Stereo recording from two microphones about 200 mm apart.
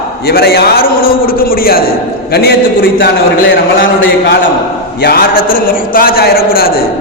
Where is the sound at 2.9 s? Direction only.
50° left (ahead or behind).